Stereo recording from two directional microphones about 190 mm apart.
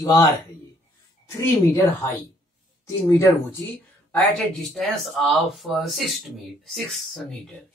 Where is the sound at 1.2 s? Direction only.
15° left (ahead or behind).